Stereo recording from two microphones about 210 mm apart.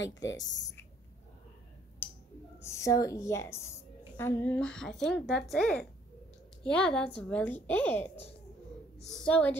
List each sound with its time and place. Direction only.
0.0 s speech: 60° left (ahead or behind)
2.6 s a woman's voice: 15° left (ahead or behind)